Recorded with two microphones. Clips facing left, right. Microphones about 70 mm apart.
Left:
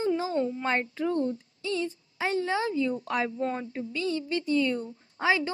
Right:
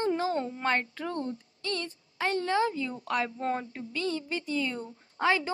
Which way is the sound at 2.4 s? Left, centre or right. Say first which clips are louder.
Right 2 dB; centre.